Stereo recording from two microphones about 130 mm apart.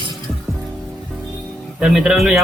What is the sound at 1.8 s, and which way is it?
Speech, 5° right (ahead or behind).